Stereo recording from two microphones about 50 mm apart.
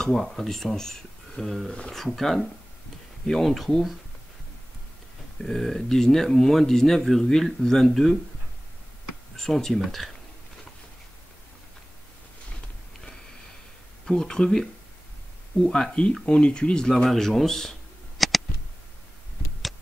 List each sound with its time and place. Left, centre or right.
0.2 s speech: centre
5.4 s speech: centre
9.4 s speech: centre
14.0 s speech: centre
17.1 s camera: centre